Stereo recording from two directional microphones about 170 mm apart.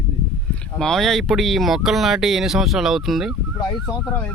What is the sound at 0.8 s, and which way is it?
Speech, centre (ahead or behind).